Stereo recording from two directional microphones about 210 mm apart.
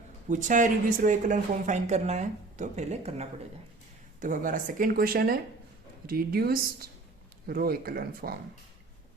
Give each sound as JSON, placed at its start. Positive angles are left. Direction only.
{"t": 0.3, "sound": "speech", "side_deg": -35}